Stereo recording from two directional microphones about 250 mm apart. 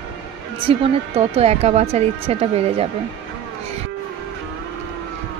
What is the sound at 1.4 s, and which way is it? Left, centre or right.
Speech, right.